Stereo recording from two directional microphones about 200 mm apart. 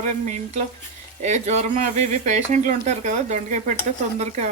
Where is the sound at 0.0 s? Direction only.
35° right (ahead or behind).